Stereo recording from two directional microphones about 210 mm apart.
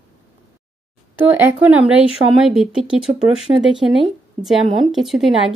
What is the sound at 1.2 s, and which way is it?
Speech, 10° right (ahead or behind).